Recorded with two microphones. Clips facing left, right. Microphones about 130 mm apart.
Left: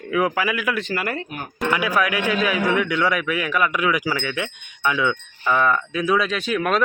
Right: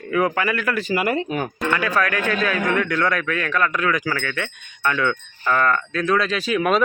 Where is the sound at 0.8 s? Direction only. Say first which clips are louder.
Right 5 dB; 15° right (ahead or behind).